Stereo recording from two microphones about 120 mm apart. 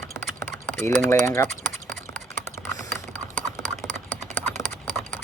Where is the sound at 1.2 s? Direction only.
25° left (ahead or behind).